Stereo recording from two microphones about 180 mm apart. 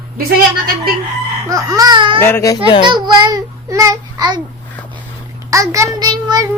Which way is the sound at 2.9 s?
25° right (ahead or behind).